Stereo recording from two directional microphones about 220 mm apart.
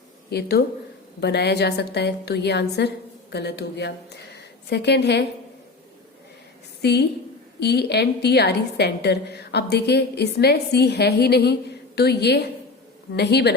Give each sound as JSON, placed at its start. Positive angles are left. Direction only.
{"t": 0.3, "sound": "a woman's voice", "side_deg": 45}
{"t": 6.8, "sound": "a woman's voice", "side_deg": 50}